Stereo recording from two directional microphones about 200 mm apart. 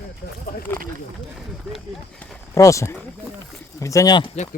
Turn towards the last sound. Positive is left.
turn(degrees=20)  # may be behind; listen again after turning